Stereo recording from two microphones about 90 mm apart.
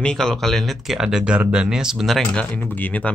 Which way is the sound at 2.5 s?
20° left (ahead or behind).